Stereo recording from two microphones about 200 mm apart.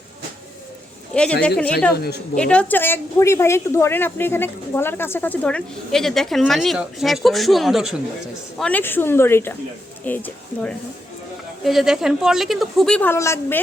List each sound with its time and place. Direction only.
1.1 s speech: 5° left (ahead or behind)
2.0 s a woman's voice: 55° left (ahead or behind)
2.3 s a woman's voice: 5° left (ahead or behind)